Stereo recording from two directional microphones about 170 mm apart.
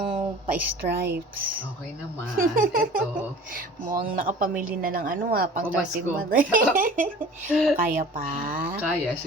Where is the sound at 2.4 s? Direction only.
55° right (ahead or behind).